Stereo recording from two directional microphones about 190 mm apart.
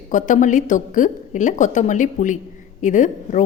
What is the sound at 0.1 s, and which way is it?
A woman's voice, 40° left (ahead or behind).